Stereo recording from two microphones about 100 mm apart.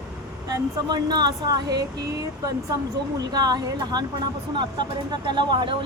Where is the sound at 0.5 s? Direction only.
45° right (ahead or behind).